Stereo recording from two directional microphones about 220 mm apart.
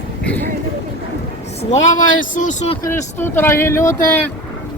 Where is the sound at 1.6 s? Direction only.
35° left (ahead or behind).